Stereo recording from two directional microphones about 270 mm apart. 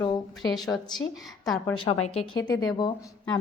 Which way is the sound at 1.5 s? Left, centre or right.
Centre.